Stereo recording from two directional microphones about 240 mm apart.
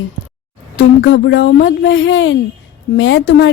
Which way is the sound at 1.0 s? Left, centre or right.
Left.